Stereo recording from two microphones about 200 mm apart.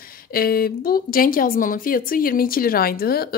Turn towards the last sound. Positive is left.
turn(degrees=50)  # may be behind; listen again after turning